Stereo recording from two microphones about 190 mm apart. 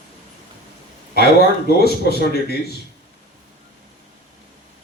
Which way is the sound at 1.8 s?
55° left (ahead or behind).